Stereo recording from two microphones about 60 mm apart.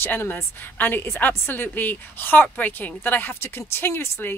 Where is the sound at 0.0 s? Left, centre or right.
Left.